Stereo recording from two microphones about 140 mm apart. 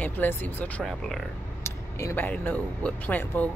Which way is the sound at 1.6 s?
20° left (ahead or behind).